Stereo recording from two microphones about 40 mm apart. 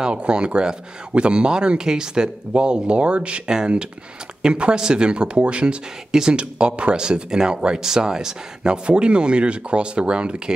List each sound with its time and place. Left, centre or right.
0.0 s speech: right
3.4 s speech: right